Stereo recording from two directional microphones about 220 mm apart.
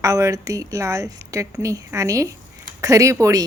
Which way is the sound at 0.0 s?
15° right (ahead or behind).